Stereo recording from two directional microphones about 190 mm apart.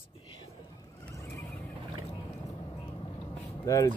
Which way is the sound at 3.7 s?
20° left (ahead or behind).